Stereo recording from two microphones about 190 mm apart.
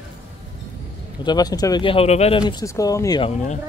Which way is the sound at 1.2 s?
20° left (ahead or behind).